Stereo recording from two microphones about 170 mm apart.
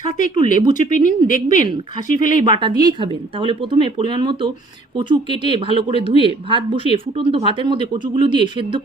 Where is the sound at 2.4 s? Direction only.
30° right (ahead or behind).